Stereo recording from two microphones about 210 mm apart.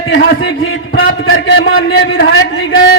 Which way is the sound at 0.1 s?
65° left (ahead or behind).